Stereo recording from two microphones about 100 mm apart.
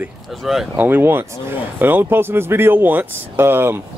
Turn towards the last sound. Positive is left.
turn(degrees=-25)  # may be behind; listen again after turning